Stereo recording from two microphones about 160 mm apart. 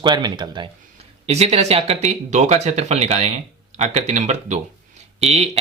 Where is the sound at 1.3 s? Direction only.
40° right (ahead or behind).